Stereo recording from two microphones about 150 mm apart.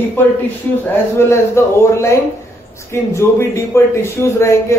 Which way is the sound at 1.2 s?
15° left (ahead or behind).